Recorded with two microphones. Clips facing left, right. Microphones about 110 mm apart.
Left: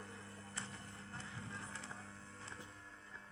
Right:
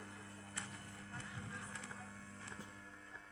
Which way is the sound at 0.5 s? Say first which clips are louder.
Left 1 dB; 30° left (ahead or behind).